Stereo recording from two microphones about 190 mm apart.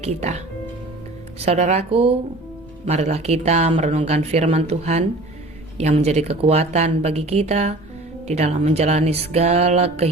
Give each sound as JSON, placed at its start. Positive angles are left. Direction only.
{"t": 0.0, "sound": "speech", "side_deg": -35}
{"t": 1.5, "sound": "speech", "side_deg": -35}